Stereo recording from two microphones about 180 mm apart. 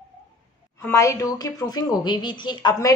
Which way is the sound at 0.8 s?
15° left (ahead or behind).